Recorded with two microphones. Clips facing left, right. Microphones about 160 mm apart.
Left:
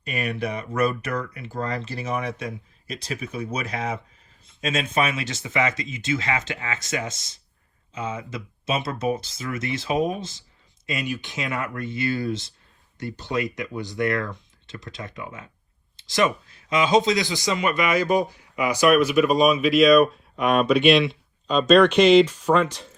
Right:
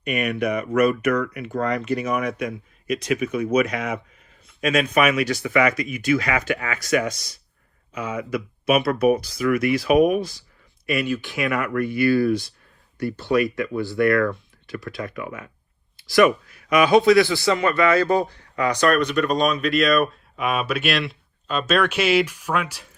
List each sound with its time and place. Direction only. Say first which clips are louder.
0.0 s speech: right 5 dB; 30° left (ahead or behind); by 22.9 s 10° right (ahead or behind)